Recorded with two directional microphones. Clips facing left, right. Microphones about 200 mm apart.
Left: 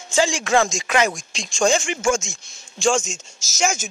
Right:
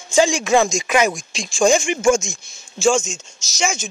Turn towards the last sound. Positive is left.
turn(degrees=45)  # may be behind; listen again after turning